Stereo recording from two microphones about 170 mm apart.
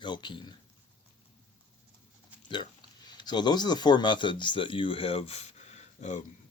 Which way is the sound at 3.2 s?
25° left (ahead or behind).